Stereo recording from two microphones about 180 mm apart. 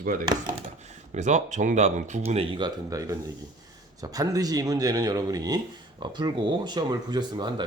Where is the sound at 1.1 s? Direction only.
40° right (ahead or behind); by 7.6 s 25° right (ahead or behind).